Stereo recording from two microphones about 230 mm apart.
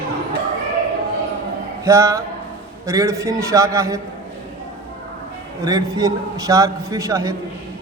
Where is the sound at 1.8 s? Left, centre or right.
Centre.